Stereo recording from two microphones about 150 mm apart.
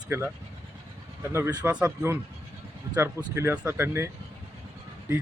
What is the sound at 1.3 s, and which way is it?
Speech, 15° right (ahead or behind).